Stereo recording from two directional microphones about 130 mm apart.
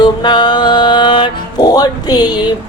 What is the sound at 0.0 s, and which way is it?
Music, 35° left (ahead or behind).